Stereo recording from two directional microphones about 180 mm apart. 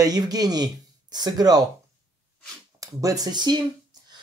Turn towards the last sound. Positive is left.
turn(degrees=-25)  # may be behind; listen again after turning